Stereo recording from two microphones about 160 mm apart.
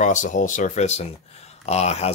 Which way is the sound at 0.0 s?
50° left (ahead or behind).